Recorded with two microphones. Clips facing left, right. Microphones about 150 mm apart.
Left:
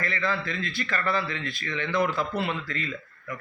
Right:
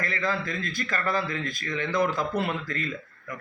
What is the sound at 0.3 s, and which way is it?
A man's voice, 45° right (ahead or behind).